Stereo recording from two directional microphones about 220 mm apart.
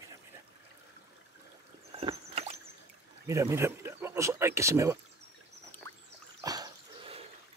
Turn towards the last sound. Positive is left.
turn(degrees=-20)  # may be behind; listen again after turning